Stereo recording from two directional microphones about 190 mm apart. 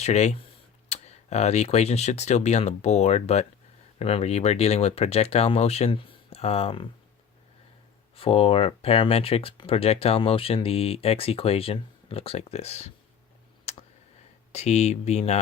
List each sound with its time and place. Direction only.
0.0 s speech: 35° left (ahead or behind)
8.1 s speech: 30° left (ahead or behind)
13.7 s clicking: 35° left (ahead or behind)
14.5 s speech: 35° left (ahead or behind)